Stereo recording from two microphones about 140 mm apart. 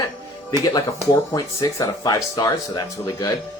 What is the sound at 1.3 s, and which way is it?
Speech, 25° left (ahead or behind).